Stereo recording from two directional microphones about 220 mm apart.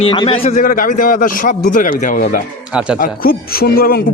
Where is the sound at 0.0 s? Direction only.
25° left (ahead or behind).